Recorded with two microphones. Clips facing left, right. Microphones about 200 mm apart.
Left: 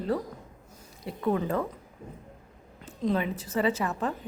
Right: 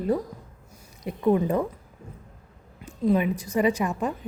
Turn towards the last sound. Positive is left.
turn(degrees=-15)  # may be behind; listen again after turning